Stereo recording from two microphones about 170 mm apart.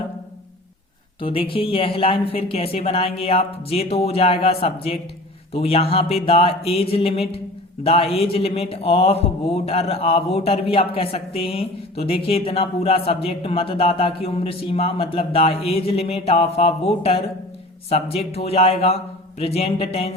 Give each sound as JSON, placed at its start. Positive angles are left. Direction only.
{"t": 1.2, "sound": "a man's voice", "side_deg": 30}